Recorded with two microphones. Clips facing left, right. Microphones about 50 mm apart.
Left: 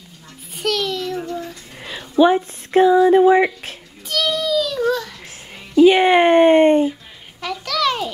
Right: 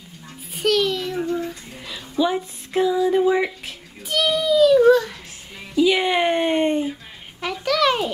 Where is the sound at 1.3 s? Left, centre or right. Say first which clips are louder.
Right 3 dB; centre.